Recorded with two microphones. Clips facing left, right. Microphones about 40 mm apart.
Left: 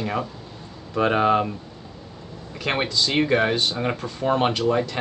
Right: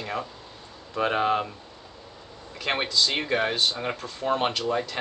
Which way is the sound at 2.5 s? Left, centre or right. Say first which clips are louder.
Left 2 dB; centre.